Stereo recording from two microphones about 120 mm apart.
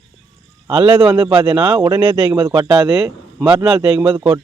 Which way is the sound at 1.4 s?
35° right (ahead or behind).